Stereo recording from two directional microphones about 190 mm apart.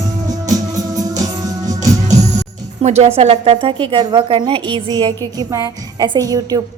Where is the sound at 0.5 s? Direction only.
20° right (ahead or behind).